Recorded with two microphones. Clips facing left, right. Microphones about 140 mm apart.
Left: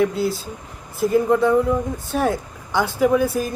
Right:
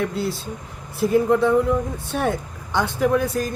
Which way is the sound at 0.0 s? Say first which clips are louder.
Left 4 dB; centre (ahead or behind).